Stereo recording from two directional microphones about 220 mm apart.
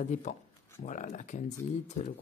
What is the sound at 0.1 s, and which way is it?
Speech, 35° left (ahead or behind).